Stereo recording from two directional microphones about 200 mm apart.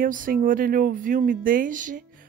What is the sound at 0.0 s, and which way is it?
Speech, 45° right (ahead or behind).